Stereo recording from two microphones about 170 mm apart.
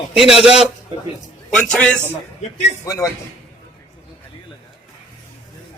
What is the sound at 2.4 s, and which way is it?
Speech, 40° left (ahead or behind).